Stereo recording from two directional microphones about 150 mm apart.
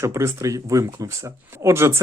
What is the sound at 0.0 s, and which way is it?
Speech, 20° right (ahead or behind).